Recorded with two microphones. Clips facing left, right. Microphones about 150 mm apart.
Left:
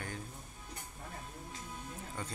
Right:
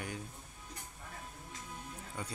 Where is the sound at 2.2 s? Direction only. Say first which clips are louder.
Right 1 dB; 10° right (ahead or behind).